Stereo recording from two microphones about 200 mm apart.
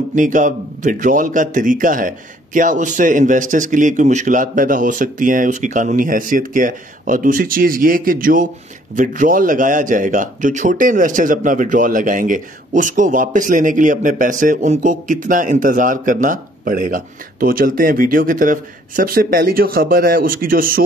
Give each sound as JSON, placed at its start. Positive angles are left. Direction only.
{"t": 0.1, "sound": "a man's voice", "side_deg": -40}